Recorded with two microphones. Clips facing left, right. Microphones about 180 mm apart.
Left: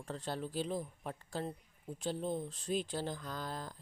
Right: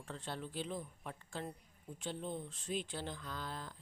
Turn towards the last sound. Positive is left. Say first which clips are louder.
# left 3 dB
turn(degrees=40)  # may be behind; listen again after turning